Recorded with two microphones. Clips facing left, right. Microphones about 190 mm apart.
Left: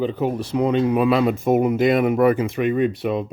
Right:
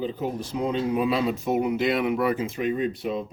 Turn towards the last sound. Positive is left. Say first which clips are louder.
# left 6 dB
turn(degrees=70)  # may be behind; listen again after turning